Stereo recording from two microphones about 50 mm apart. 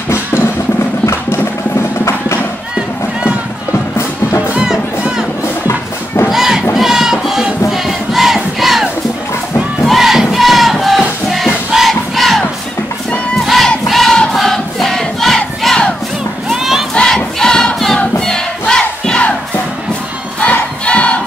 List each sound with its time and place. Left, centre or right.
0.1 s music: left
1.8 s clip-clop: left
4.6 s music: centre
6.3 s crowd: centre
9.8 s music: centre
13.8 s choir: centre
14.3 s crowd: centre
16.5 s crowd: centre
16.9 s crowd: centre
17.4 s choir: centre
18.2 s crowd: centre
20.3 s choir: left